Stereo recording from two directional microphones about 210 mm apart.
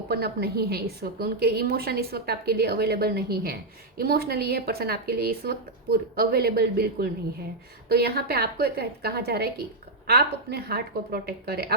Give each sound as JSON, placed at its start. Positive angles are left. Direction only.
{"t": 0.1, "sound": "a woman's voice", "side_deg": -50}